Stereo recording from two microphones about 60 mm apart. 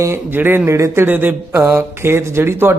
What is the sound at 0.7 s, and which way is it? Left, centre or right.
Speech, right.